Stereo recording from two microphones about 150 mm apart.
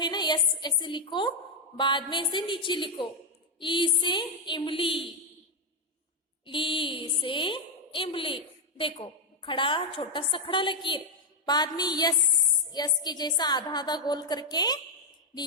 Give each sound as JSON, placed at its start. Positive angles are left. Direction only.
{"t": 0.0, "sound": "a woman's voice", "side_deg": 30}
{"t": 6.4, "sound": "a woman's voice", "side_deg": 35}